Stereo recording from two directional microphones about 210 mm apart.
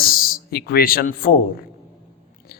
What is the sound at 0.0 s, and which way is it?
Speech, 45° left (ahead or behind).